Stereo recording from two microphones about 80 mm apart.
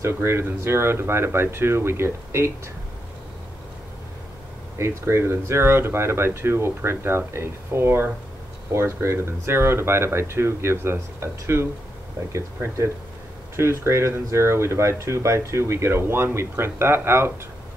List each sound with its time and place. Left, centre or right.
0.0 s speech: right
4.7 s speech: right
13.6 s speech: right